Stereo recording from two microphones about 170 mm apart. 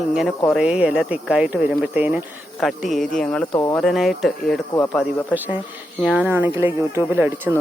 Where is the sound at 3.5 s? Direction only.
30° left (ahead or behind).